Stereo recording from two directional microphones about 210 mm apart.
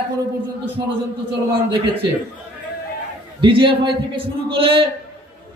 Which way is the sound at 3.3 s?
25° right (ahead or behind).